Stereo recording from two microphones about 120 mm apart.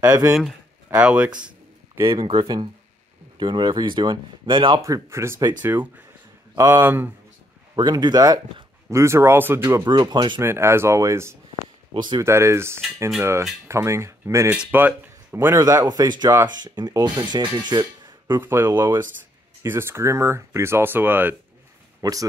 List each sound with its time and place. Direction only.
0.1 s speech: 25° right (ahead or behind)
0.8 s speech: 10° right (ahead or behind)
2.0 s speech: 30° right (ahead or behind)
2.2 s speech: 40° right (ahead or behind)
4.8 s speech: 25° right (ahead or behind)
7.7 s speech: 35° right (ahead or behind)
9.8 s speech: 35° right (ahead or behind)
10.4 s speech: 20° right (ahead or behind)
11.9 s speech: 40° right (ahead or behind)
12.2 s speech: 20° right (ahead or behind)
18.2 s speech: 15° right (ahead or behind)
22.0 s speech: 30° right (ahead or behind)